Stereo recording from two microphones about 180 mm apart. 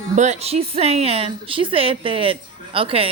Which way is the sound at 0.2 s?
35° right (ahead or behind).